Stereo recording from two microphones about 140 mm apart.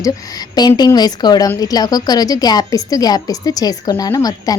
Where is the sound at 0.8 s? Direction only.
30° left (ahead or behind).